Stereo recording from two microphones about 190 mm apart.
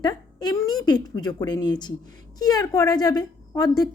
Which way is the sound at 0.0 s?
20° left (ahead or behind).